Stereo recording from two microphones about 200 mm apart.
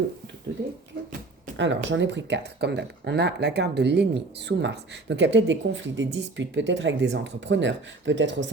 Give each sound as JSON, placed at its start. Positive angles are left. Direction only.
{"t": 1.5, "sound": "speech", "side_deg": -65}